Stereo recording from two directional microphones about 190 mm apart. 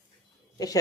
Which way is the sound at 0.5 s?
20° left (ahead or behind).